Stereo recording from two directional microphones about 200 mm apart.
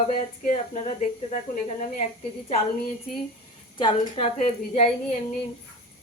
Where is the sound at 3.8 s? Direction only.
25° left (ahead or behind).